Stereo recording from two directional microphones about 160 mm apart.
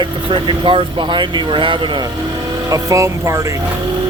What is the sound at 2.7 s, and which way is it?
Speech, 20° right (ahead or behind).